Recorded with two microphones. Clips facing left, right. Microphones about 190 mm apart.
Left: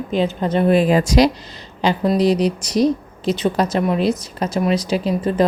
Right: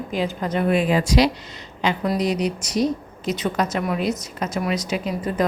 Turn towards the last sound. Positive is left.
turn(degrees=30)  # may be behind; listen again after turning